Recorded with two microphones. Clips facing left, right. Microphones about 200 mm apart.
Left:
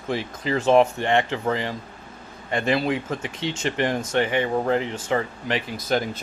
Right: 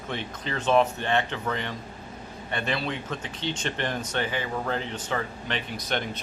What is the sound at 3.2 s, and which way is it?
Speech, 90° left.